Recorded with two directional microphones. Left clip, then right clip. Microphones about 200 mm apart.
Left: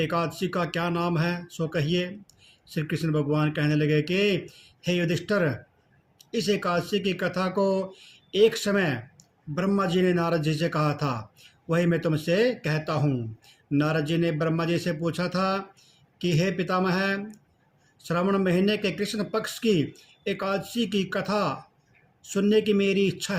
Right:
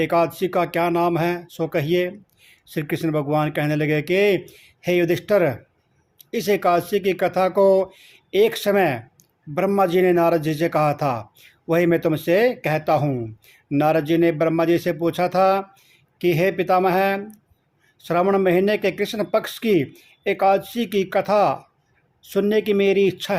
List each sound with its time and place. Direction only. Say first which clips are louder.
0.0 s a man's voice: right 8 dB; 40° right (ahead or behind)